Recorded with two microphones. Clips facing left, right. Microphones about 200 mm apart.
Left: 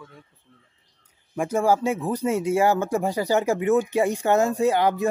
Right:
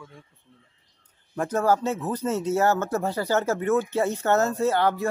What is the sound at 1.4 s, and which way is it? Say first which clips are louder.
Speech: left 2 dB; 10° left (ahead or behind).